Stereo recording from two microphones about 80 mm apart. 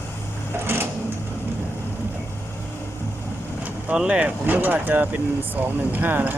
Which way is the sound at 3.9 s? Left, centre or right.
Centre.